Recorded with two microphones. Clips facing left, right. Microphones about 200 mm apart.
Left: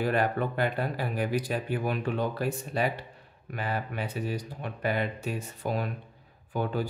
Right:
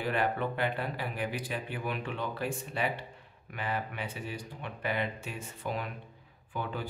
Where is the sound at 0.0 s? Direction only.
40° left (ahead or behind).